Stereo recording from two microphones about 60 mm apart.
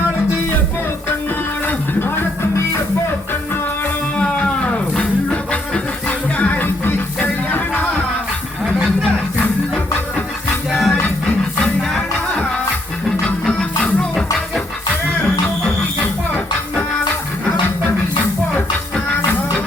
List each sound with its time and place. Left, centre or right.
1.6 s music: left
4.2 s music: centre
10.7 s music: centre
11.6 s music: centre
19.1 s music: left